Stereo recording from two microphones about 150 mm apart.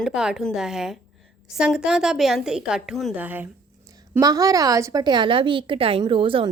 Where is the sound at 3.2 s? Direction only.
10° right (ahead or behind).